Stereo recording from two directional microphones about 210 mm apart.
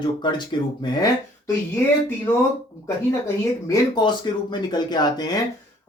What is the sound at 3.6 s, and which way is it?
Speech, 20° left (ahead or behind).